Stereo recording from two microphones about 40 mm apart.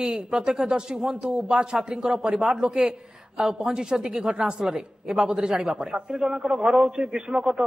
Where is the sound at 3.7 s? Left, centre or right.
Right.